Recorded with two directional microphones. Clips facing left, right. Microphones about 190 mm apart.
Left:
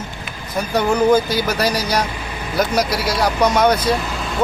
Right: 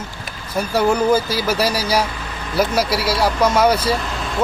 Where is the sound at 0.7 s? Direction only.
5° right (ahead or behind).